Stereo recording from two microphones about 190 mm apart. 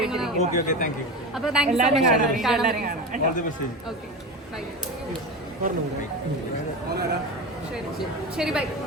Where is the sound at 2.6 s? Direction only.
45° right (ahead or behind).